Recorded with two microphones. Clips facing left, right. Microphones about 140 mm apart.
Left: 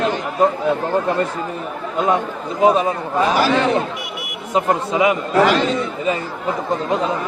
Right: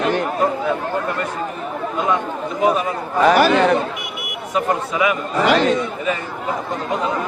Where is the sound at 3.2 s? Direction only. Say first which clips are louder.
Right 5 dB; 60° right (ahead or behind).